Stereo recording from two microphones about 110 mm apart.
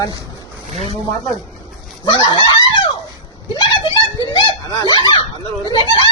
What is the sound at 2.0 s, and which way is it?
Fowl, 45° left (ahead or behind).